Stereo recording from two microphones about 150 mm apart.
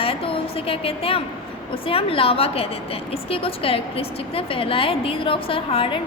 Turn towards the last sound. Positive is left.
turn(degrees=35)  # may be behind; listen again after turning